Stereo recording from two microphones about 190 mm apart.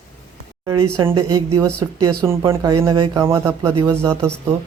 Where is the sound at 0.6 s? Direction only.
20° right (ahead or behind).